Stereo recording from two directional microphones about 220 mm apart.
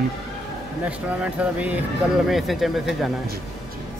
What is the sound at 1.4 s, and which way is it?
Speech, 5° right (ahead or behind).